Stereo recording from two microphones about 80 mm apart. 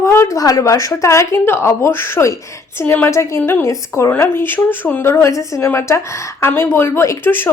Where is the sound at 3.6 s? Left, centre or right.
Left.